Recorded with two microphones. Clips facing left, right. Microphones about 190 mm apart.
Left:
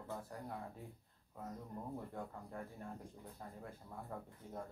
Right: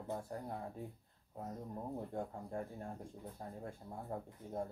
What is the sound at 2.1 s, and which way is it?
Speech, 30° right (ahead or behind).